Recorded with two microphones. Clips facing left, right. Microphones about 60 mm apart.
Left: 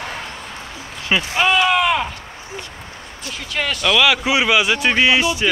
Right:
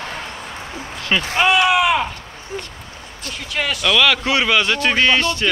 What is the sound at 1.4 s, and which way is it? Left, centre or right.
Speech, centre.